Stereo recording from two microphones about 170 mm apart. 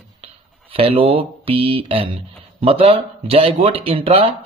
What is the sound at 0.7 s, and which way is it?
A man's voice, 30° right (ahead or behind).